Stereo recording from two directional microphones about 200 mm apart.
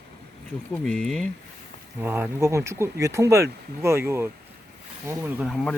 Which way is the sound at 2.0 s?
10° right (ahead or behind).